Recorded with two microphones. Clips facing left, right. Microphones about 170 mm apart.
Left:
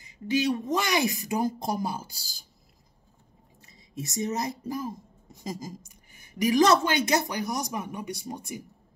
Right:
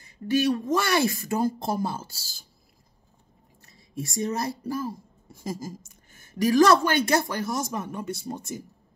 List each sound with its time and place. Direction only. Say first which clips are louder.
0.5 s speech: right 3 dB; 20° left (ahead or behind)
3.6 s speech: right 3 dB; 20° left (ahead or behind)